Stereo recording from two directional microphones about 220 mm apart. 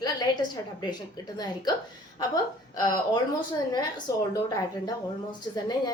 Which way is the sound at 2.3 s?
15° left (ahead or behind).